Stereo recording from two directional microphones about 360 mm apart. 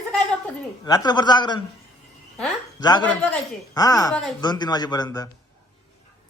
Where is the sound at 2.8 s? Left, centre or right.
Centre.